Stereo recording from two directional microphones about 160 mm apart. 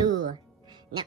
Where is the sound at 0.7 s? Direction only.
25° right (ahead or behind).